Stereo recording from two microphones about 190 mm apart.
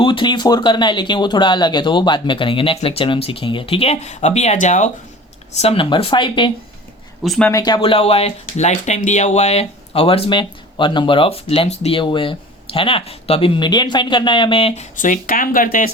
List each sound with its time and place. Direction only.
0.0 s speech: 25° left (ahead or behind)
5.5 s speech: 30° left (ahead or behind)
7.3 s speech: 5° left (ahead or behind)
7.5 s speech: 20° left (ahead or behind)
14.9 s speech: 45° left (ahead or behind)